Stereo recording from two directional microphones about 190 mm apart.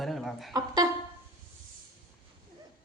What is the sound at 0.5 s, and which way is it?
Speech, 20° right (ahead or behind).